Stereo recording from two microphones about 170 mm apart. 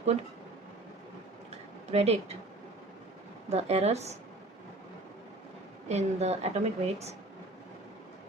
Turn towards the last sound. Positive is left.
turn(degrees=-40)  # may be behind; listen again after turning